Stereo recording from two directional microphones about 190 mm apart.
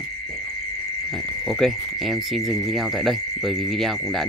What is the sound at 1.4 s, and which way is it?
Speech, centre (ahead or behind).